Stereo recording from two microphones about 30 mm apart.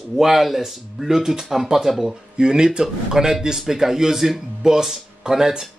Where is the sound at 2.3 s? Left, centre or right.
Right.